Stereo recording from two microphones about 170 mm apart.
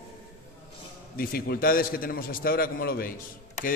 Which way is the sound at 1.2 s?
60° left (ahead or behind).